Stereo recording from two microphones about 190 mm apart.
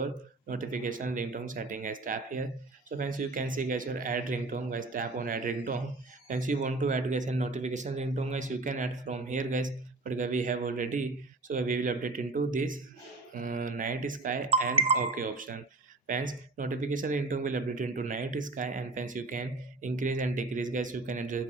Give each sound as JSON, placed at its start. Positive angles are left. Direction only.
{"t": 0.0, "sound": "speech", "side_deg": -45}
{"t": 14.8, "sound": "speech", "side_deg": -30}
{"t": 15.1, "sound": "speech", "side_deg": -45}